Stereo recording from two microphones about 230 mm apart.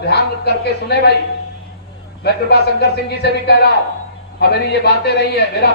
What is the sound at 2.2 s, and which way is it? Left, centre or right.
A woman's voice, left.